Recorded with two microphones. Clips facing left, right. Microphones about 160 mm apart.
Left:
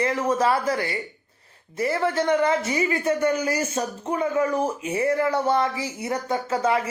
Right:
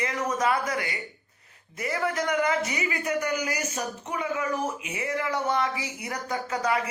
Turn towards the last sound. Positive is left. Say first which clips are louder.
# left 4 dB
turn(degrees=25)  # may be behind; listen again after turning